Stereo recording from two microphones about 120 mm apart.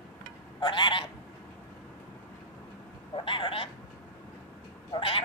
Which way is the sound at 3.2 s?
45° left (ahead or behind).